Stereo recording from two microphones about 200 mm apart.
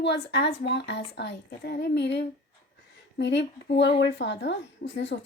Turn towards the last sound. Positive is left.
turn(degrees=40)  # may be behind; listen again after turning